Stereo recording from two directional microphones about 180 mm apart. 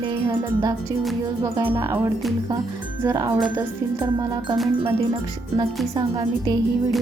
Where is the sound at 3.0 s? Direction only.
15° right (ahead or behind).